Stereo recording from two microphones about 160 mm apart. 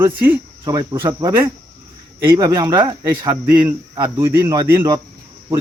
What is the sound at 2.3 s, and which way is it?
Speech, 25° right (ahead or behind).